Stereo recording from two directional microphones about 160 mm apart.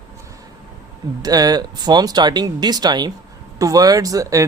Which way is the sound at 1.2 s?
25° right (ahead or behind).